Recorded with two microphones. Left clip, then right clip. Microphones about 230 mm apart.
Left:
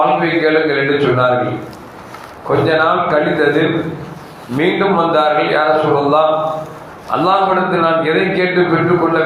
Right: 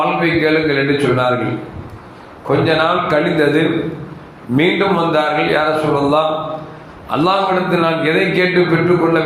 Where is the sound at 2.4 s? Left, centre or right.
Right.